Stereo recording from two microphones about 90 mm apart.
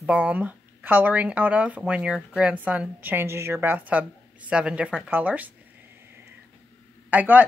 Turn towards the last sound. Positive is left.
turn(degrees=-15)  # may be behind; listen again after turning